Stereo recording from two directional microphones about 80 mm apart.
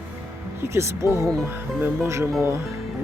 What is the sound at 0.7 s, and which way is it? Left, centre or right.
Speech, right.